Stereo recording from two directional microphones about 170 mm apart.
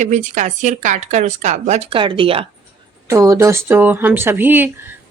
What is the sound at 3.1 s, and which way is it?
A woman's voice, 15° right (ahead or behind).